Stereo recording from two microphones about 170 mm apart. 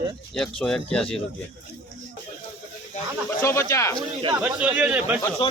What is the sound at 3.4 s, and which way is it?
Speech, 15° left (ahead or behind).